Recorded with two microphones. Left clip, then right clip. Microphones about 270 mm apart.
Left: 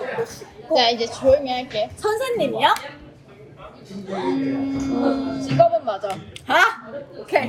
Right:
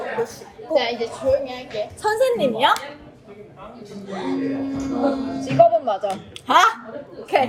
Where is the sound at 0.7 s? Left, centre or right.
Centre.